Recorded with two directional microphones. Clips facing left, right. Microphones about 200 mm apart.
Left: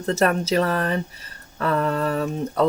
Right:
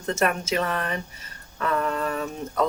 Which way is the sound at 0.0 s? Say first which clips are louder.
Left 4 dB; 35° left (ahead or behind).